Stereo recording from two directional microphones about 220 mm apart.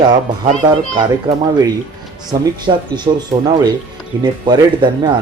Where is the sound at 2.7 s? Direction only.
20° right (ahead or behind).